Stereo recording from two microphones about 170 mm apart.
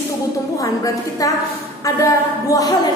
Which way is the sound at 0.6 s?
20° left (ahead or behind).